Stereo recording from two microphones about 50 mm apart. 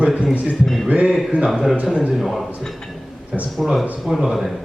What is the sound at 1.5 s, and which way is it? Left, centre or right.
A man's voice, centre.